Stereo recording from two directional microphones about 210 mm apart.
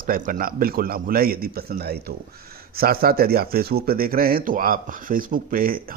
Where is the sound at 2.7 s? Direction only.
45° right (ahead or behind).